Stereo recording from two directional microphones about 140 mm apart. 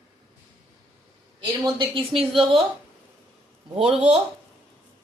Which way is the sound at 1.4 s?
35° right (ahead or behind).